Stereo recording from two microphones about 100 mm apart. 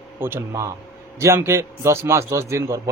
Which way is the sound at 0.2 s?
25° right (ahead or behind).